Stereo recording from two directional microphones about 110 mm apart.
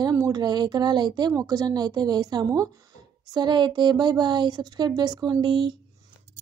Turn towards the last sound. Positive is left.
turn(degrees=-45)  # may be behind; listen again after turning